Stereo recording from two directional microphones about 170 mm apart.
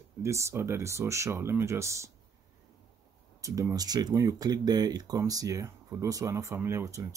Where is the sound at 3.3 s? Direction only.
20° right (ahead or behind).